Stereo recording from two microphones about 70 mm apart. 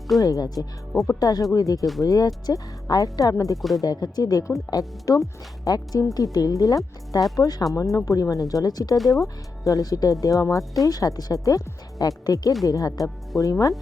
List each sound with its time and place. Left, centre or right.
0.2 s speech: left
3.8 s speech: left
5.6 s a woman's voice: left
9.1 s speech: left